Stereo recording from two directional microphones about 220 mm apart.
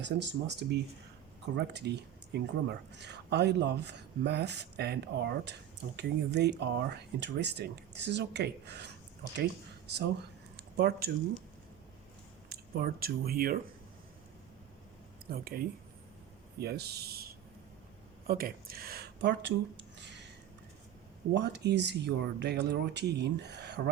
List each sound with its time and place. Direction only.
0.0 s speech: 50° right (ahead or behind)
10.6 s a sound: 45° right (ahead or behind)
12.5 s speech: 45° right (ahead or behind)
15.3 s speech: 45° right (ahead or behind)
21.3 s speech: 50° right (ahead or behind)